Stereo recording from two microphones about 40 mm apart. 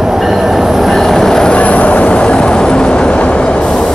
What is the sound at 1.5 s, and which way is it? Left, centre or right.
Train, left.